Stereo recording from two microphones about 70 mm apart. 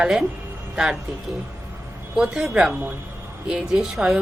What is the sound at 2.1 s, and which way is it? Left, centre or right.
Speech, centre.